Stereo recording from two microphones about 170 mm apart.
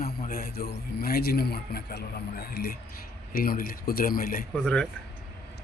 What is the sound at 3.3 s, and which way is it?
Speech, 60° left (ahead or behind).